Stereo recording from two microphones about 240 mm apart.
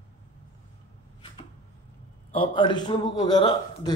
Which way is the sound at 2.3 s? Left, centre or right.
Left.